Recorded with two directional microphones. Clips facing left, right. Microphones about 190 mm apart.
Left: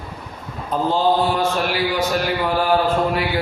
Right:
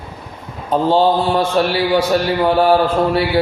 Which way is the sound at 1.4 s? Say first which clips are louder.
Right 5 dB; 30° right (ahead or behind).